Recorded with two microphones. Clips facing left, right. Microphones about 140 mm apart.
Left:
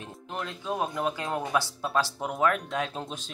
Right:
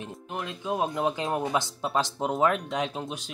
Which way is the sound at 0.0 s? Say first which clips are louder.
Right 1 dB; 20° right (ahead or behind).